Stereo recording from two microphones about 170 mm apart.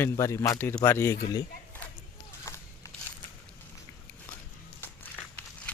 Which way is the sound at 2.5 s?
15° left (ahead or behind).